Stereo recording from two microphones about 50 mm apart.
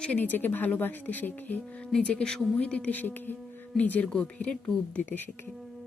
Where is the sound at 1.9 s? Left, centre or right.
Left.